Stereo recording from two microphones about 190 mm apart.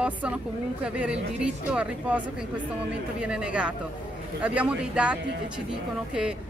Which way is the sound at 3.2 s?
5° right (ahead or behind).